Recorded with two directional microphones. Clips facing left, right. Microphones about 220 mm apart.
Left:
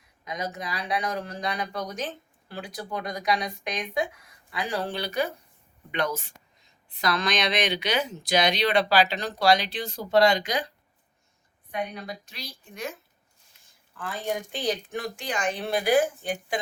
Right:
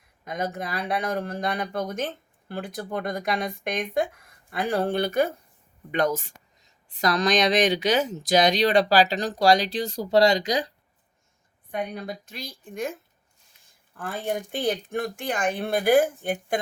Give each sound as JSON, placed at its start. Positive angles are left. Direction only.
{"t": 0.3, "sound": "speech", "side_deg": -55}
{"t": 11.7, "sound": "speech", "side_deg": -50}